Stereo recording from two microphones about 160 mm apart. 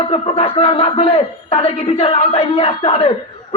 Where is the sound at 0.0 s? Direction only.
35° left (ahead or behind).